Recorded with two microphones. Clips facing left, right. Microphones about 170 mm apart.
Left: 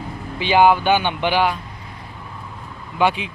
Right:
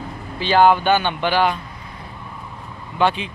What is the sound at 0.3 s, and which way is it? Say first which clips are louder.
Speech: even; 15° left (ahead or behind).